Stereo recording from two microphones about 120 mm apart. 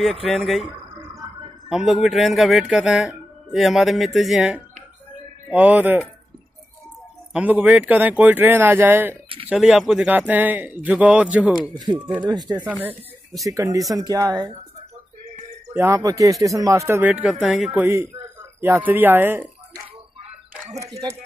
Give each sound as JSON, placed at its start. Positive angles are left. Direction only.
{"t": 0.0, "sound": "speech", "side_deg": 0}
{"t": 1.7, "sound": "speech", "side_deg": -5}
{"t": 7.3, "sound": "speech", "side_deg": -10}
{"t": 9.5, "sound": "speech", "side_deg": -5}
{"t": 12.2, "sound": "speech", "side_deg": -35}
{"t": 12.6, "sound": "speech", "side_deg": -15}
{"t": 13.5, "sound": "speech", "side_deg": -30}
{"t": 15.7, "sound": "speech", "side_deg": -25}
{"t": 17.1, "sound": "speech", "side_deg": -5}
{"t": 17.7, "sound": "speech", "side_deg": -20}